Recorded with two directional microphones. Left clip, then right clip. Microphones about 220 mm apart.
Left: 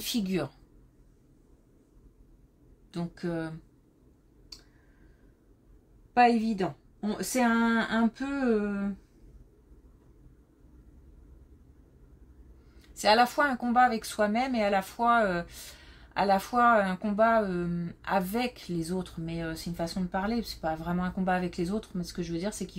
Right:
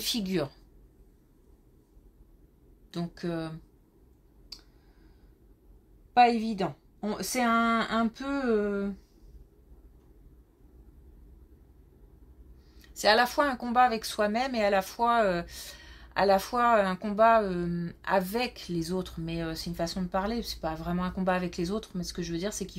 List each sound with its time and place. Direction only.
0.0 s speech: 25° right (ahead or behind)
2.9 s speech: 25° right (ahead or behind)
6.5 s speech: 25° right (ahead or behind)
12.9 s speech: 25° right (ahead or behind)